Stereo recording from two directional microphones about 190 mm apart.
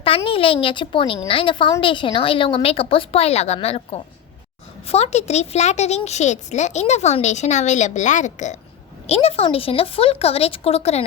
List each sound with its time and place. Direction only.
0.3 s a woman's voice: 30° left (ahead or behind)